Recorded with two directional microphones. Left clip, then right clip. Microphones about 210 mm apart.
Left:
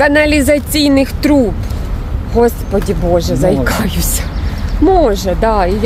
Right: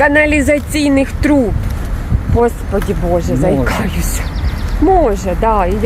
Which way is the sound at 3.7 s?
20° left (ahead or behind).